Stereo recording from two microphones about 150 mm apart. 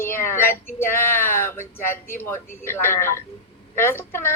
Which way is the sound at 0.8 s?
15° left (ahead or behind).